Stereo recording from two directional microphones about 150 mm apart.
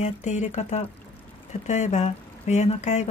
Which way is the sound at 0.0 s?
50° left (ahead or behind).